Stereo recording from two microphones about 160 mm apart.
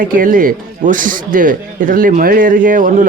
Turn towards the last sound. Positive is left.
turn(degrees=-55)  # may be behind; listen again after turning